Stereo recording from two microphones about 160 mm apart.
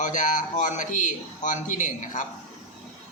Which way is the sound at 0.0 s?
50° left (ahead or behind).